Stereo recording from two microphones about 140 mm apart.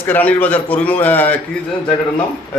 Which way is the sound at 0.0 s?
10° left (ahead or behind).